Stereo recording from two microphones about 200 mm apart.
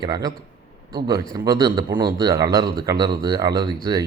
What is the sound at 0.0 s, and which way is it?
Speech, 20° right (ahead or behind).